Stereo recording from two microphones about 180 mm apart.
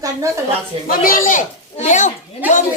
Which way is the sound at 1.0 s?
50° left (ahead or behind).